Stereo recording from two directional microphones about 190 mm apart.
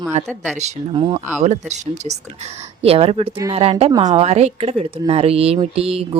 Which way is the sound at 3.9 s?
20° right (ahead or behind).